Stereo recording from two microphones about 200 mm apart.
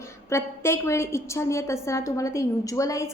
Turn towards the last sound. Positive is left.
turn(degrees=15)  # may be behind; listen again after turning